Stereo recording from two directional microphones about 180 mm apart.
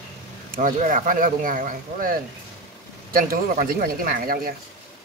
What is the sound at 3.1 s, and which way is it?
Speech, 50° right (ahead or behind).